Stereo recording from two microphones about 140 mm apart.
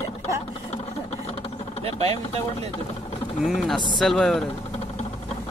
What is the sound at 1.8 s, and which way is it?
Speech, 45° right (ahead or behind).